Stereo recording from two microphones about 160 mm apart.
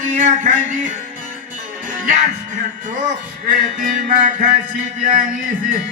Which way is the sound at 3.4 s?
55° right (ahead or behind).